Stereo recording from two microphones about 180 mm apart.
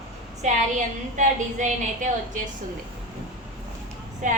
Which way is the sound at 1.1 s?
45° right (ahead or behind).